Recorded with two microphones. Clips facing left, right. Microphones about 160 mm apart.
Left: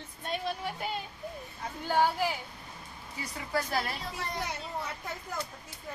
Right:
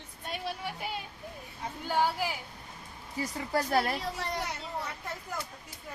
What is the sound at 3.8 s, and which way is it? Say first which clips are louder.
Speech: right 4 dB; 55° right (ahead or behind).